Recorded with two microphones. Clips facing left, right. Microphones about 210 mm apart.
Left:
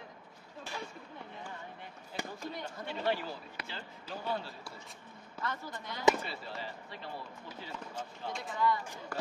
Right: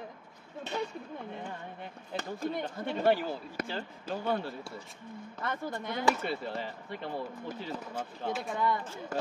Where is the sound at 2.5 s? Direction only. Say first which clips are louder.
Right 7 dB; 55° right (ahead or behind).